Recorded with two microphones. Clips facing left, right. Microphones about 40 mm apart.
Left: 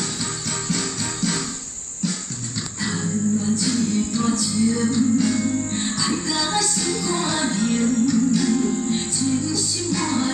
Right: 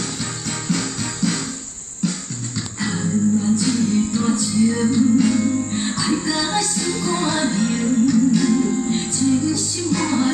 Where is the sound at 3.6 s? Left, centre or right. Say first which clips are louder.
Right 3 dB; centre.